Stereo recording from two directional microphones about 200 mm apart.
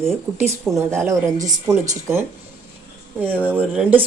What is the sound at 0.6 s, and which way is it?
Speech, 15° right (ahead or behind).